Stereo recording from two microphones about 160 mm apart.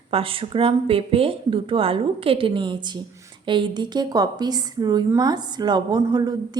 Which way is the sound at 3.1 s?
20° right (ahead or behind).